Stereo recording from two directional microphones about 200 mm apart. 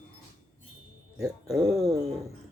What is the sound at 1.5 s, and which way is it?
Speech, 20° right (ahead or behind).